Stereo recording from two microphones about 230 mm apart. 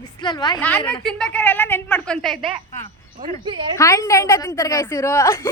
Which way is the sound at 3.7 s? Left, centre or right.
Centre.